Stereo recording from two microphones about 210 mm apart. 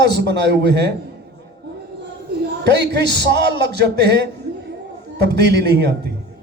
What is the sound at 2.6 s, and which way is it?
A man's voice, 55° right (ahead or behind).